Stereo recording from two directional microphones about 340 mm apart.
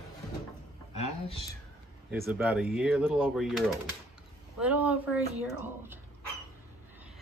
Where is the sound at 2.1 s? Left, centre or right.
Centre.